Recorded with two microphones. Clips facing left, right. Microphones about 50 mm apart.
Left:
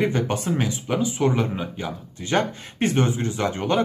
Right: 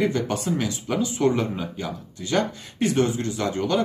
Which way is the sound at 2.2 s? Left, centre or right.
Left.